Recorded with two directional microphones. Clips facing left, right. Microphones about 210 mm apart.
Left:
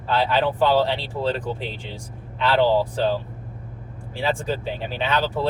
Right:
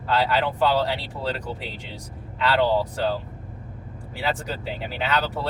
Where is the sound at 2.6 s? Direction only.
30° left (ahead or behind).